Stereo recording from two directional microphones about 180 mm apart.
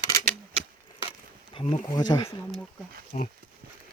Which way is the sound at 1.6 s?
40° left (ahead or behind).